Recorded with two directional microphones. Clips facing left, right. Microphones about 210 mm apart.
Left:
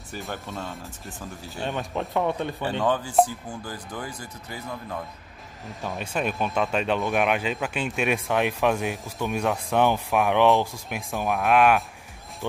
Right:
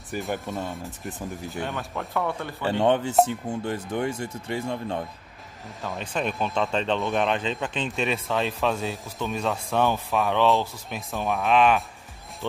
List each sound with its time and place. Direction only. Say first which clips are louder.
0.1 s speech: right 5 dB; 15° right (ahead or behind)
1.6 s speech: left 4 dB; 20° left (ahead or behind)
2.8 s speech: right 2 dB; 25° right (ahead or behind)
5.9 s speech: even; 5° left (ahead or behind)
11.2 s speech: left 1 dB; centre (ahead or behind)